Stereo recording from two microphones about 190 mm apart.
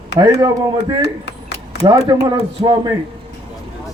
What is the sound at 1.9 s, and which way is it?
Speech, 25° right (ahead or behind).